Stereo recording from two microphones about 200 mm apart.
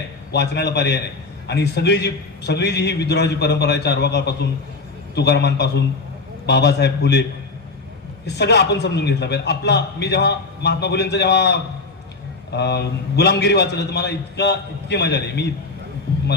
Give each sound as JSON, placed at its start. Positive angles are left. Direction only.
{"t": 0.3, "sound": "a man's voice", "side_deg": 55}
{"t": 8.3, "sound": "a man's voice", "side_deg": 55}